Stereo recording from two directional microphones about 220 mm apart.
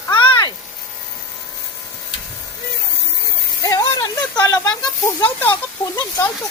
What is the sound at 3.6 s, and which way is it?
Speech, 15° left (ahead or behind).